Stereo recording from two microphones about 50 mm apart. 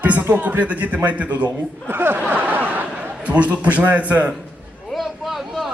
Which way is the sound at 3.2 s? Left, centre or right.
Right.